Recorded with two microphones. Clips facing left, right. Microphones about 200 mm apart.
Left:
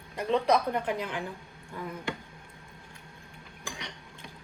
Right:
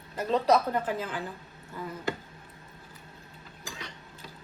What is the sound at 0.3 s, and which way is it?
Speech, 15° left (ahead or behind).